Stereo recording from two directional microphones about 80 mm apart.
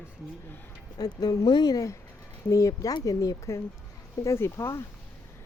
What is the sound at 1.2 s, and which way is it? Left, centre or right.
Speech, left.